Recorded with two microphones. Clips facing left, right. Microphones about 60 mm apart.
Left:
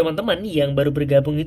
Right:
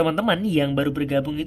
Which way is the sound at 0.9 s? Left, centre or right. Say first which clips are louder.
Left 5 dB; centre.